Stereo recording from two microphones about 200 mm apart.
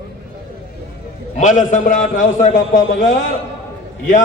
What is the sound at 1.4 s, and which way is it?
A man's voice, 40° left (ahead or behind).